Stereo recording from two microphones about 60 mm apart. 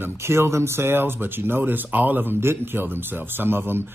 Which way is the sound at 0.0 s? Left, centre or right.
Right.